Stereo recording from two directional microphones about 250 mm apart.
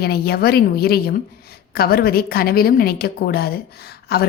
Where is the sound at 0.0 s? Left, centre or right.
Left.